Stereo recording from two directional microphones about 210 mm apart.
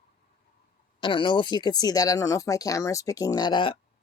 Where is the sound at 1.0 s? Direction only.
25° left (ahead or behind).